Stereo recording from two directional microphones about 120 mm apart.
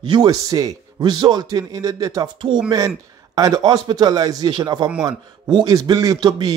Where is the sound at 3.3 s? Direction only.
30° right (ahead or behind).